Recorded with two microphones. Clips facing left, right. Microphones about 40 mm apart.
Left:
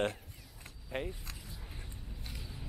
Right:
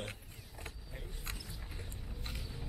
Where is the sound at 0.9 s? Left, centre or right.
Left.